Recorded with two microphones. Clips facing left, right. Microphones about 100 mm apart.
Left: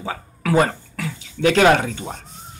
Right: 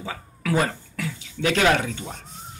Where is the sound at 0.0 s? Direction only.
45° left (ahead or behind).